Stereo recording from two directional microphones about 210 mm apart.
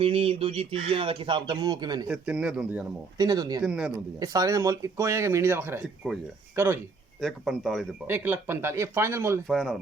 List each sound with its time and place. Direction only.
0.0 s speech: 25° right (ahead or behind)
2.0 s speech: 5° right (ahead or behind)
3.2 s speech: 20° right (ahead or behind)
3.6 s speech: 5° right (ahead or behind)
4.2 s speech: 15° right (ahead or behind)
6.0 s speech: centre (ahead or behind)
8.0 s speech: 10° right (ahead or behind)
9.5 s speech: centre (ahead or behind)